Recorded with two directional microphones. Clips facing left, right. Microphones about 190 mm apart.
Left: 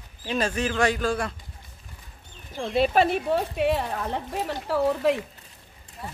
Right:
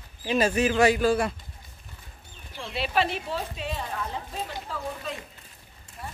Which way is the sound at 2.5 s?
50° left (ahead or behind).